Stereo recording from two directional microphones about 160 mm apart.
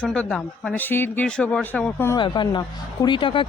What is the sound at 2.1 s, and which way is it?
Speech, 30° left (ahead or behind).